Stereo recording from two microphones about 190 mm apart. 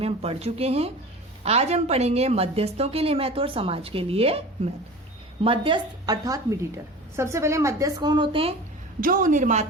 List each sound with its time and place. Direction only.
0.0 s a woman's voice: 30° right (ahead or behind)
9.0 s a woman's voice: 45° right (ahead or behind)